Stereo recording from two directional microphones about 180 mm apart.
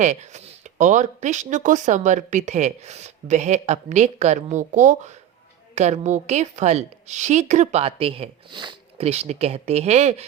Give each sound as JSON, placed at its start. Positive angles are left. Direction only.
{"t": 0.0, "sound": "speech", "side_deg": -40}